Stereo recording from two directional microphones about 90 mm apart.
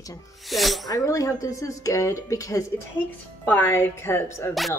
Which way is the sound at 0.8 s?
40° left (ahead or behind).